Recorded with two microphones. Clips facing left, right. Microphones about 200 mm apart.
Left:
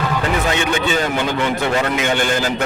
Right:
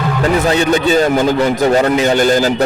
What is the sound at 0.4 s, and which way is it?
A man's voice, 35° right (ahead or behind).